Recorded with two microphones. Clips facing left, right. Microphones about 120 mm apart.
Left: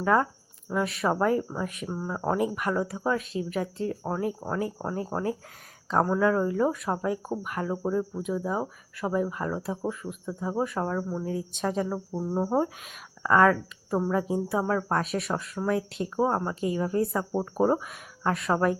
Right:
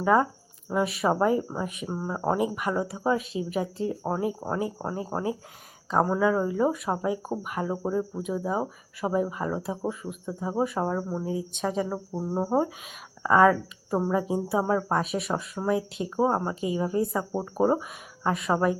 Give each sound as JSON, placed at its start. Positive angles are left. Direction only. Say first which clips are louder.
{"t": 0.0, "sound": "speech", "louder": "right 2 dB", "side_deg": -10}
{"t": 11.5, "sound": "speech", "louder": "left 1 dB", "side_deg": 0}